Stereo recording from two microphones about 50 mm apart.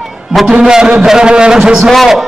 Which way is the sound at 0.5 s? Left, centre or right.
Centre.